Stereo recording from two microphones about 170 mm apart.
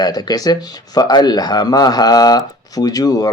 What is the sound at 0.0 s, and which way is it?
A man's voice, 25° left (ahead or behind).